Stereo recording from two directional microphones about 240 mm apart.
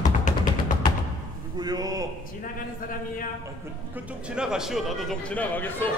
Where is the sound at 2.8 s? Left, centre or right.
Left.